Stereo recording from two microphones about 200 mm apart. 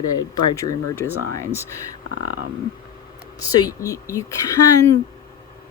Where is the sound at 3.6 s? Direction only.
15° left (ahead or behind).